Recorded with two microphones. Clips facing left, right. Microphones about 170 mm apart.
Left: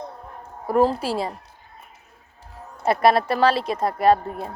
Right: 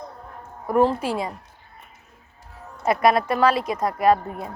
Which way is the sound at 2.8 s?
30° left (ahead or behind).